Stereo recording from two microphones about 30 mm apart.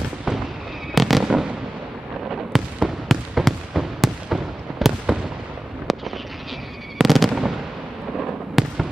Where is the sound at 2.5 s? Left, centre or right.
Centre.